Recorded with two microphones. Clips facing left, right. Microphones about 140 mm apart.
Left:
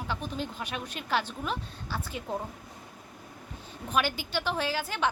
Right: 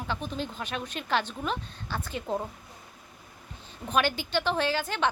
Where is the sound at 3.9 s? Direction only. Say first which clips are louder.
Right 3 dB; 5° left (ahead or behind).